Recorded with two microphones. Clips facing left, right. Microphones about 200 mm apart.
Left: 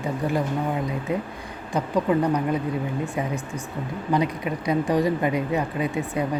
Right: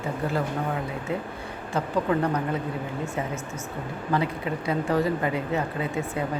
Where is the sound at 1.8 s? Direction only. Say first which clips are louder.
Left 3 dB; 15° left (ahead or behind).